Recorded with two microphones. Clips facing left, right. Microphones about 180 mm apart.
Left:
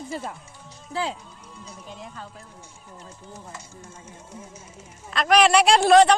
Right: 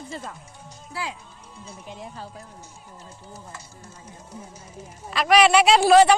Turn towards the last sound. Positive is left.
turn(degrees=-5)  # may be behind; listen again after turning